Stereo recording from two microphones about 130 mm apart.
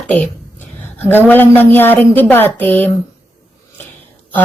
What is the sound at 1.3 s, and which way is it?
Speech, 15° left (ahead or behind).